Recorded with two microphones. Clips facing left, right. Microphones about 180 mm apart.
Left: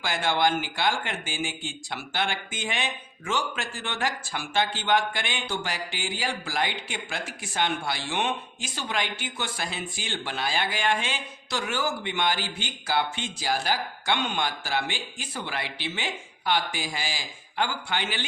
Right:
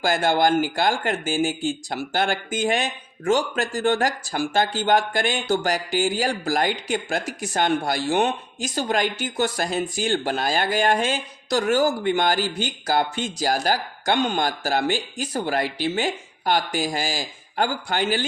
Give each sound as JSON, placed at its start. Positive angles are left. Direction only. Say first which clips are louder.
{"t": 0.0, "sound": "speech", "louder": "right 5 dB", "side_deg": -40}